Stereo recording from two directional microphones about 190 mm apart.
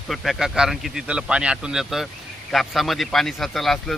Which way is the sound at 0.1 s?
Centre (ahead or behind).